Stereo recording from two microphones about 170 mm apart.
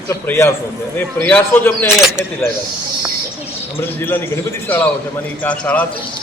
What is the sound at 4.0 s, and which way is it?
A man's voice, 10° left (ahead or behind).